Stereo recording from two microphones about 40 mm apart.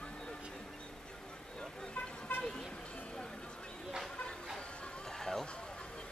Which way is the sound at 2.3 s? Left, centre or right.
Left.